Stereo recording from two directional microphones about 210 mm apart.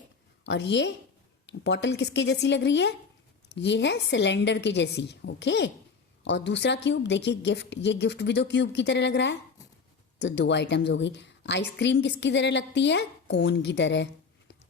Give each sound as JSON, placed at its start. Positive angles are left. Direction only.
{"t": 0.4, "sound": "a woman's voice", "side_deg": 60}